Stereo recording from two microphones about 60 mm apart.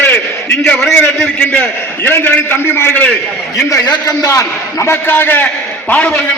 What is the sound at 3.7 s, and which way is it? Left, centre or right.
Speech, left.